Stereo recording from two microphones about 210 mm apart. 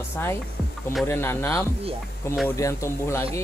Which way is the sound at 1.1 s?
10° left (ahead or behind).